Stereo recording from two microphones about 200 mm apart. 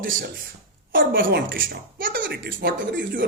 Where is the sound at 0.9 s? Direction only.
45° right (ahead or behind).